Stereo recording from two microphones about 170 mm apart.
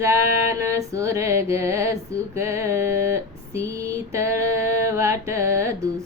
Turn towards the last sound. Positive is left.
turn(degrees=-15)  # may be behind; listen again after turning